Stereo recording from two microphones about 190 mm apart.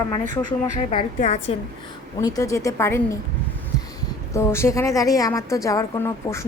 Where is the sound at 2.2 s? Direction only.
20° left (ahead or behind).